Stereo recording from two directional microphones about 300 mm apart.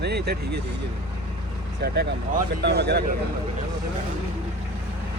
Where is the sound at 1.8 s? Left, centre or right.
Right.